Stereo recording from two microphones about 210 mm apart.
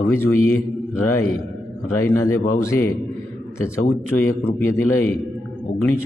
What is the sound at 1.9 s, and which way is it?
Speech, 10° left (ahead or behind).